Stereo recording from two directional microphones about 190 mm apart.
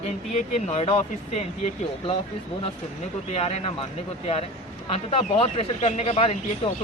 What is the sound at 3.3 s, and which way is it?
Speech, 30° left (ahead or behind).